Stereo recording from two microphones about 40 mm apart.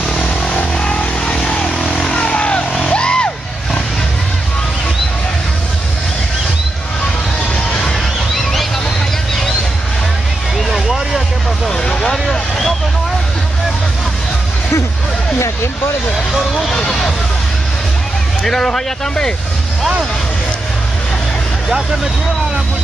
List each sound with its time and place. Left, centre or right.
0.4 s a sound: left
2.0 s vehicle: left
2.9 s music: left
10.7 s vehicle: centre
11.6 s vehicle: centre
12.3 s vehicle: centre
16.5 s vehicle: centre
18.4 s vehicle: centre